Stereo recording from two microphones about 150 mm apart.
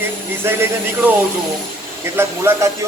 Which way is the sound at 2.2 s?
15° right (ahead or behind).